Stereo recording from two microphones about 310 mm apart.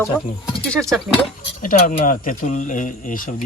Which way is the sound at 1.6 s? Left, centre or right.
Left.